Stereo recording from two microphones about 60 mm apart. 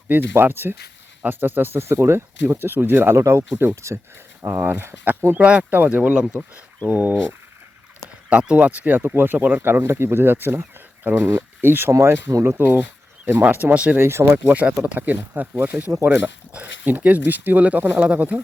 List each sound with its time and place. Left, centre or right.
0.1 s speech: right
3.2 s speech: right
3.5 s speech: right
3.8 s speech: right
4.4 s speech: right
5.4 s speech: centre
8.3 s speech: centre
14.0 s speech: right
14.4 s speech: right